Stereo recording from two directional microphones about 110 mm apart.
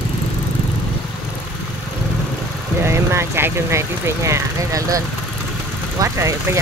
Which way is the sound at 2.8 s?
25° right (ahead or behind).